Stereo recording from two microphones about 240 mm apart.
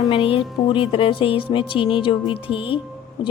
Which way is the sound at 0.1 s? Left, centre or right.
Left.